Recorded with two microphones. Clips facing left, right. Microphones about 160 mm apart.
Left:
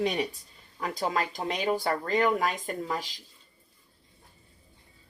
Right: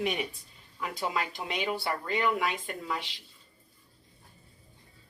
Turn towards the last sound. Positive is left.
turn(degrees=40)  # may be behind; listen again after turning